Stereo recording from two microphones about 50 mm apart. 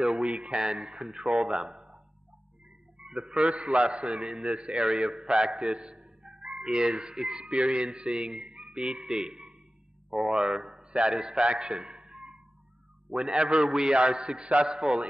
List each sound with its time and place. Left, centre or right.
0.0 s a man's voice: centre
3.0 s a man's voice: centre
5.9 s music: centre
7.4 s a man's voice: right
11.4 s speech: right
11.7 s a sound: centre
13.1 s a man's voice: centre